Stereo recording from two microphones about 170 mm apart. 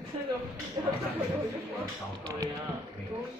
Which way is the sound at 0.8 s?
20° right (ahead or behind).